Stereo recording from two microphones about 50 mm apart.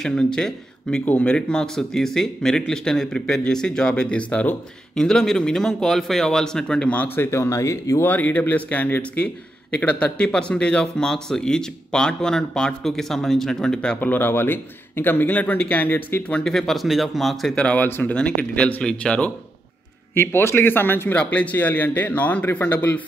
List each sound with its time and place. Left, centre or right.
0.0 s speech: centre; by 4.6 s left
4.9 s speech: centre
7.2 s speech: left
8.0 s a man's voice: left
9.7 s speech: left
14.0 s a man's voice: left
16.4 s speech: centre
17.7 s a man's voice: left
18.1 s speech: left
20.2 s speech: left
21.1 s speech: left
21.5 s a man's voice: left